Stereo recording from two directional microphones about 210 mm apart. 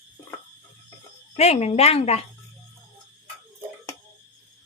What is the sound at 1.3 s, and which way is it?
Speech, 30° left (ahead or behind).